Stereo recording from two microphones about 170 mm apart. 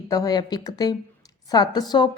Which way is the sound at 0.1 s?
20° left (ahead or behind).